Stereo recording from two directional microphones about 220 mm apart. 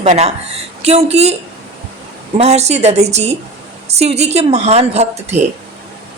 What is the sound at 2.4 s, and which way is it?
Speech, 30° right (ahead or behind).